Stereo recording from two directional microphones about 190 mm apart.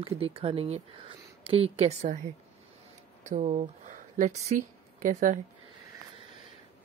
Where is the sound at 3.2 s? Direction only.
35° right (ahead or behind).